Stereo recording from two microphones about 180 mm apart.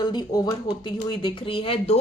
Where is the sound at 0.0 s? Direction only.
25° left (ahead or behind).